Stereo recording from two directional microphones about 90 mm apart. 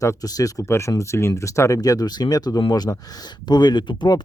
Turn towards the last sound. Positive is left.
turn(degrees=55)  # may be behind; listen again after turning